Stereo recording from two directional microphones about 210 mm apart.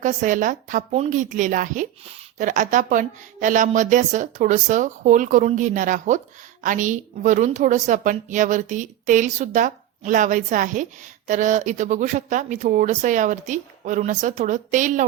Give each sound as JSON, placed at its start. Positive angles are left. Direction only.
{"t": 0.0, "sound": "a woman's voice", "side_deg": -35}